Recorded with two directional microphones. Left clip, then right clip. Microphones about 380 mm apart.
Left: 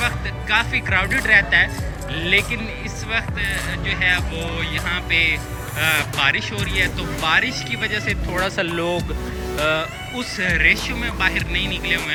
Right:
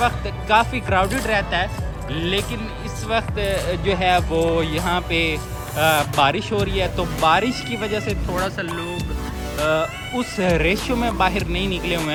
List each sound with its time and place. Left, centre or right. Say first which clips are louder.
0.0 s speech: right 2 dB; centre
10.2 s speech: left 1 dB; centre